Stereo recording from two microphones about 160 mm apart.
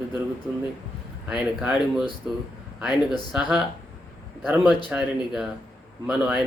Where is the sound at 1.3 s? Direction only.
5° right (ahead or behind).